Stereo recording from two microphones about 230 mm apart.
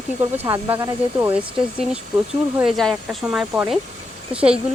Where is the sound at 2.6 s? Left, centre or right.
Centre.